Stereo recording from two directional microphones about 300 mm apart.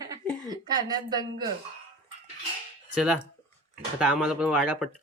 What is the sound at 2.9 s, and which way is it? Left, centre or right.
Speech, centre.